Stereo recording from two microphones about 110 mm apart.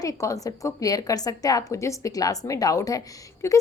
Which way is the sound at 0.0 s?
30° left (ahead or behind).